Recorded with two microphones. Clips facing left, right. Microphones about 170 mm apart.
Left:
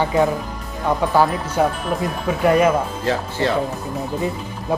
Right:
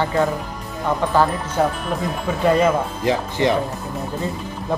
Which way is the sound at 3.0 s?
15° right (ahead or behind).